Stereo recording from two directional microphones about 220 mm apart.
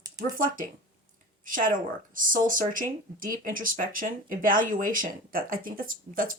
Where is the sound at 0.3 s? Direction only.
40° right (ahead or behind).